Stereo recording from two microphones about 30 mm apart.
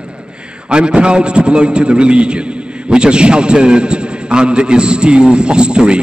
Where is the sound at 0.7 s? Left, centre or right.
Right.